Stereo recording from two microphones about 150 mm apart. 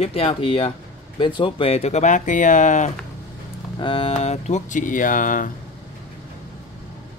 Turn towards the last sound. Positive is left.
turn(degrees=65)  # may be behind; listen again after turning